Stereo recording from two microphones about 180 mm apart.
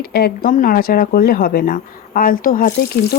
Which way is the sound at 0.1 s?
55° left (ahead or behind).